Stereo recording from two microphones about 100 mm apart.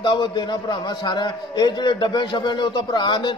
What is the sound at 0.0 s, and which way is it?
A man's voice, 50° left (ahead or behind).